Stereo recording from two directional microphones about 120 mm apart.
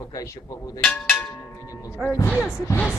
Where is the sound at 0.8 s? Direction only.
10° left (ahead or behind).